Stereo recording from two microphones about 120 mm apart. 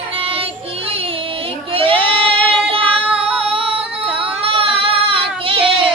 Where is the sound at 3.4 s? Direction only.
50° right (ahead or behind).